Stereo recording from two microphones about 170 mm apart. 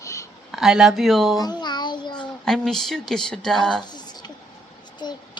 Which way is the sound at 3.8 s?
25° left (ahead or behind).